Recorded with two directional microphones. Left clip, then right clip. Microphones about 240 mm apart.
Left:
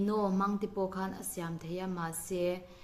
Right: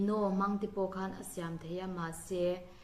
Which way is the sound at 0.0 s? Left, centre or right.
Left.